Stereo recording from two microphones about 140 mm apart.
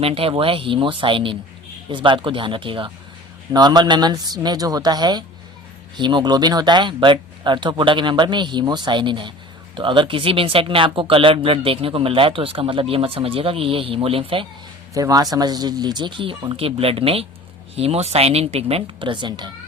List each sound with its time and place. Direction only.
0.0 s speech: 40° right (ahead or behind)
14.9 s speech: 25° right (ahead or behind)